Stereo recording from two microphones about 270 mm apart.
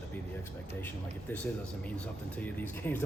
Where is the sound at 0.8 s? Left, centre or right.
Centre.